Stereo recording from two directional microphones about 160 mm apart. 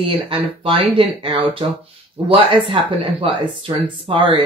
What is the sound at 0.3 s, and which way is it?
Speech, 35° right (ahead or behind).